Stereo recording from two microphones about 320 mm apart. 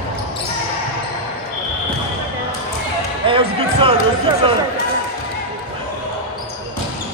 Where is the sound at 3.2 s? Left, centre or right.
Centre.